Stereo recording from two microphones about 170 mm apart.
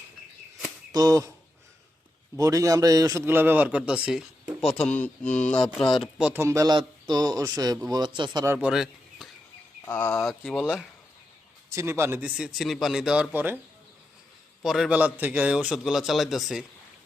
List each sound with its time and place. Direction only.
0.9 s a man's voice: 20° right (ahead or behind)
2.3 s a man's voice: 20° right (ahead or behind)
6.4 s a man's voice: 20° right (ahead or behind)
8.5 s speech: centre (ahead or behind)
9.8 s a man's voice: 10° left (ahead or behind)
11.7 s a man's voice: 15° right (ahead or behind)
14.6 s a man's voice: centre (ahead or behind)